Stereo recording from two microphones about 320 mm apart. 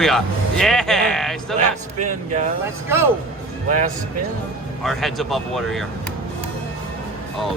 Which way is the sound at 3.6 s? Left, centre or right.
Right.